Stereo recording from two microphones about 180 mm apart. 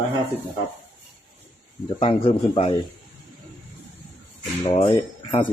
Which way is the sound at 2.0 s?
30° left (ahead or behind).